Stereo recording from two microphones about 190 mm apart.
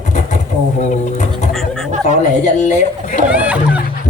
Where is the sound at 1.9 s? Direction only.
40° right (ahead or behind).